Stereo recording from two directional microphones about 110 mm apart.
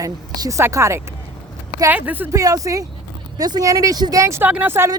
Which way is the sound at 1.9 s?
15° right (ahead or behind).